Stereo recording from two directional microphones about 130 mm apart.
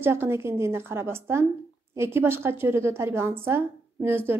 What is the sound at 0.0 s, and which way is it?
A woman's voice, 20° right (ahead or behind).